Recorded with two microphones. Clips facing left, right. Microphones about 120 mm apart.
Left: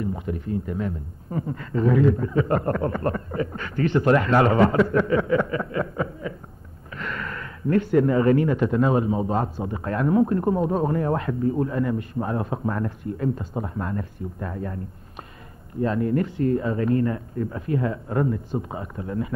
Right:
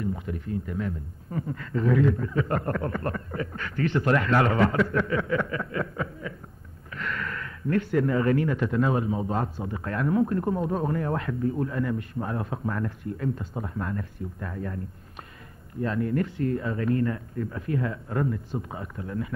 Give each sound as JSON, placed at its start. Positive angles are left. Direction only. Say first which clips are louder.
{"t": 0.0, "sound": "speech", "louder": "left 3 dB", "side_deg": 25}
{"t": 15.8, "sound": "speech", "louder": "left 4 dB", "side_deg": 25}